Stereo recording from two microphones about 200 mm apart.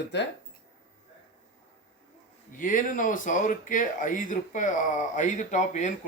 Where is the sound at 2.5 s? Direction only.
40° left (ahead or behind).